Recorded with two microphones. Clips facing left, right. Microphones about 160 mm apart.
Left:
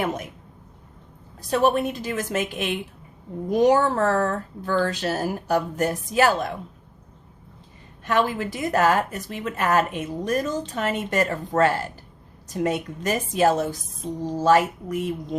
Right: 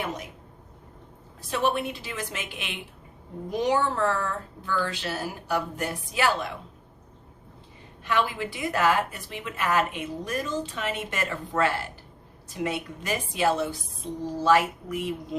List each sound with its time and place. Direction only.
0.0 s speech: 50° left (ahead or behind)
1.4 s speech: 40° left (ahead or behind)
8.0 s a woman's voice: 45° left (ahead or behind)